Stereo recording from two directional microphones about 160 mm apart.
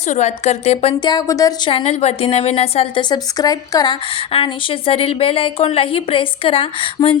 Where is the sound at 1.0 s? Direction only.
25° left (ahead or behind).